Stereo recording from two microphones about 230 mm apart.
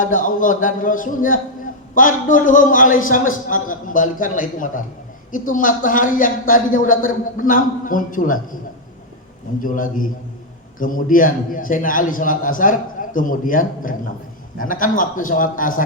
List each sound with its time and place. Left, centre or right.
0.0 s a man's voice: left
9.6 s a man's voice: left